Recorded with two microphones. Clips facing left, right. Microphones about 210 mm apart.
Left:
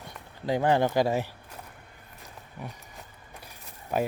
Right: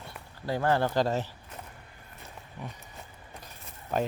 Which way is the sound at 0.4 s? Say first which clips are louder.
Left 3 dB; 15° left (ahead or behind).